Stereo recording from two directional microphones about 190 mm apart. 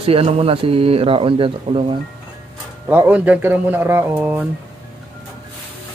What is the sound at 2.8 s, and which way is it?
Speech, 10° right (ahead or behind).